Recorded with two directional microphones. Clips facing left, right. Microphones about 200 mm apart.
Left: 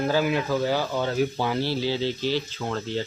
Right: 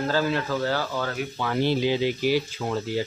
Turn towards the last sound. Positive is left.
turn(degrees=-10)  # may be behind; listen again after turning